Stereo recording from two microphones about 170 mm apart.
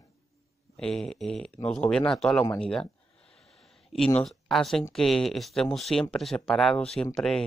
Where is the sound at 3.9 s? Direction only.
5° left (ahead or behind).